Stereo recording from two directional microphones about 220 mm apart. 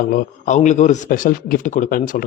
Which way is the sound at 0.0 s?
40° left (ahead or behind).